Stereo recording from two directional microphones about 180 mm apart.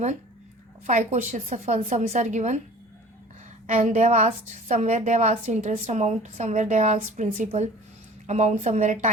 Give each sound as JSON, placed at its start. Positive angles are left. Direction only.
{"t": 0.9, "sound": "a woman's voice", "side_deg": -45}
{"t": 3.8, "sound": "a woman's voice", "side_deg": -40}